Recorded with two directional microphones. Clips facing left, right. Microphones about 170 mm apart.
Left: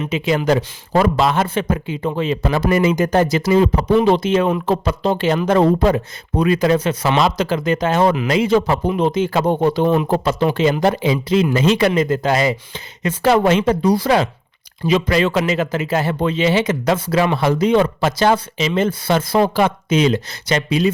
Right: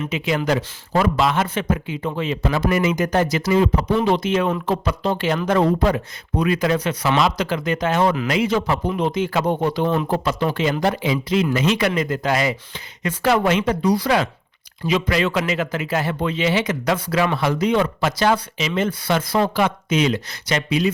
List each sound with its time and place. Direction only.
0.0 s a man's voice: 30° left (ahead or behind)
9.8 s speech: 10° left (ahead or behind)
10.1 s speech: 30° left (ahead or behind)